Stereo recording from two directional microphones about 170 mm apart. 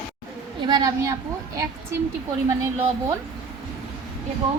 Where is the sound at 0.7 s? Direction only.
25° right (ahead or behind).